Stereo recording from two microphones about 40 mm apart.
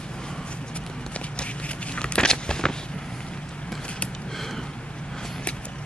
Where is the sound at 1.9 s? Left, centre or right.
Left.